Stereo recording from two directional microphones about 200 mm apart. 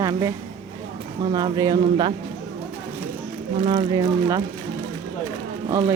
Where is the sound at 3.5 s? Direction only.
25° right (ahead or behind).